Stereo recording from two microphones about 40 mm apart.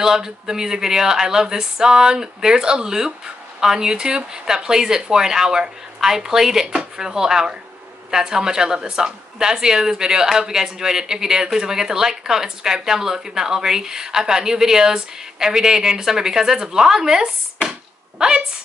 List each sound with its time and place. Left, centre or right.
0.0 s a woman's voice: centre